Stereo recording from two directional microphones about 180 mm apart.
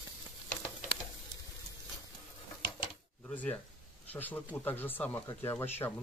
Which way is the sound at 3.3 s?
10° left (ahead or behind).